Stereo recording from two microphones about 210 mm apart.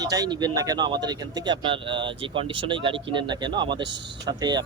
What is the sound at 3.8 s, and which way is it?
Speech, 60° right (ahead or behind).